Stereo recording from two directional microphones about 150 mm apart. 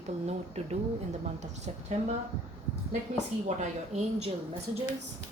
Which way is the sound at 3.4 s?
50° right (ahead or behind).